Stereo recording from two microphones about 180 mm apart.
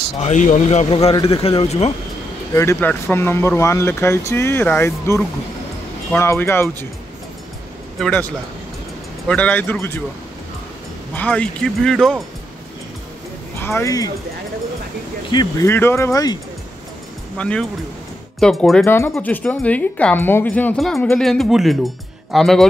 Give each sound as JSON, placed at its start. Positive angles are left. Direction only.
{"t": 0.2, "sound": "speech", "side_deg": 45}
{"t": 2.5, "sound": "speech", "side_deg": 15}
{"t": 8.0, "sound": "speech", "side_deg": 10}
{"t": 9.3, "sound": "speech", "side_deg": 10}
{"t": 11.1, "sound": "speech", "side_deg": 10}
{"t": 13.6, "sound": "speech", "side_deg": 15}
{"t": 15.3, "sound": "speech", "side_deg": 15}
{"t": 17.4, "sound": "speech", "side_deg": 5}